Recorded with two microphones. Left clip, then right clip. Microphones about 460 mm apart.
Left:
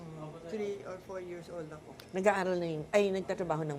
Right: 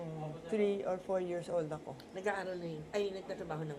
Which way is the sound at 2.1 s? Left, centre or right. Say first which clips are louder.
Left 9 dB; left.